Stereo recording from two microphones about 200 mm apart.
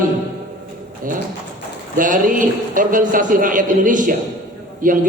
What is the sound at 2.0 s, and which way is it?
A man's voice, 40° right (ahead or behind).